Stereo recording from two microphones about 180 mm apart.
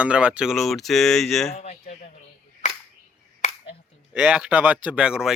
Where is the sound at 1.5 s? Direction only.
35° left (ahead or behind).